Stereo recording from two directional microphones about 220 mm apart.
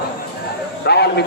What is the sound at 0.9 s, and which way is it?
Speech, 50° left (ahead or behind).